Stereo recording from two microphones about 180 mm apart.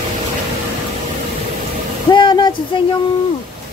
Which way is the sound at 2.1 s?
25° left (ahead or behind).